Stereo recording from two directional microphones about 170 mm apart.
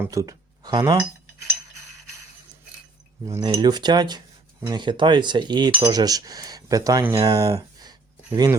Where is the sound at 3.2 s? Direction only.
20° right (ahead or behind).